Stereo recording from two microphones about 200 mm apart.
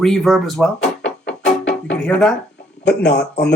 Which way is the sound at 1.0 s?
65° left (ahead or behind).